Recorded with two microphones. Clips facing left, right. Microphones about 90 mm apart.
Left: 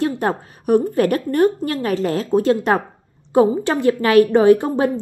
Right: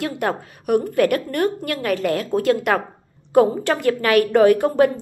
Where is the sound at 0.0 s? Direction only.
30° left (ahead or behind).